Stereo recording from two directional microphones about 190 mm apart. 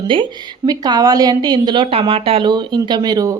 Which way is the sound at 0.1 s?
25° right (ahead or behind).